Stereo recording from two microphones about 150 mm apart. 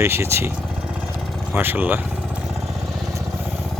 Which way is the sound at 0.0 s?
15° right (ahead or behind).